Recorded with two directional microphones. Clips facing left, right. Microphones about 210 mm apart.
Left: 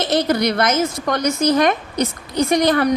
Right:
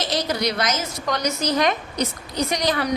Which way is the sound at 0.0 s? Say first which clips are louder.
Left 6 dB; 55° left (ahead or behind).